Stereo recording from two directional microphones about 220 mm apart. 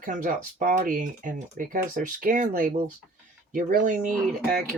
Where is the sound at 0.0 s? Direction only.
35° right (ahead or behind).